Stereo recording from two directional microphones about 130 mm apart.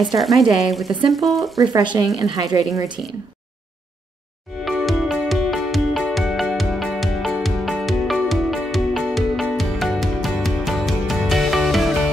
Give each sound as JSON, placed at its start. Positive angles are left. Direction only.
{"t": 0.2, "sound": "speech", "side_deg": 0}
{"t": 1.7, "sound": "speech", "side_deg": -35}
{"t": 4.6, "sound": "music", "side_deg": 0}